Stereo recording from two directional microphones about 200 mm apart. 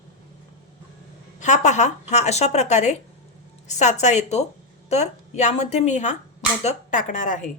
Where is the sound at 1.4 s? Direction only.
35° left (ahead or behind).